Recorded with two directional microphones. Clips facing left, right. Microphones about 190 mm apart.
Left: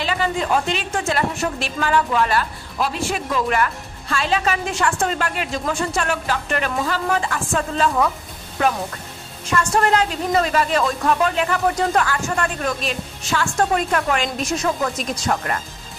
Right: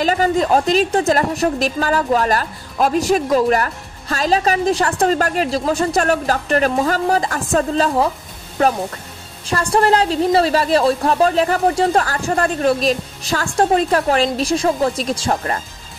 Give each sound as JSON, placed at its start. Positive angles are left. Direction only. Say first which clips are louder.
{"t": 0.0, "sound": "a woman's voice", "louder": "right 6 dB", "side_deg": -40}
{"t": 9.5, "sound": "a woman's voice", "louder": "right 3 dB", "side_deg": -35}